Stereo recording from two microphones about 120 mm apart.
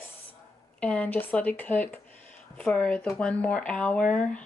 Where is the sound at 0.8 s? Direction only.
10° left (ahead or behind).